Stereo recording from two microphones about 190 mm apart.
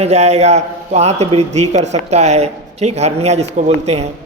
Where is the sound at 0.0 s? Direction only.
35° right (ahead or behind).